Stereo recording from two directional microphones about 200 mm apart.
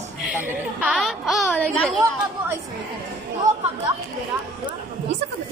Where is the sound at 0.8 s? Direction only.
5° right (ahead or behind).